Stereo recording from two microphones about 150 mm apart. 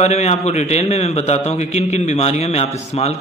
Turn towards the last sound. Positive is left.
turn(degrees=45)  # may be behind; listen again after turning